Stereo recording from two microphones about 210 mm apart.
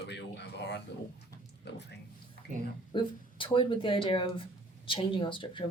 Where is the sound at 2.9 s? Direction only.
25° left (ahead or behind).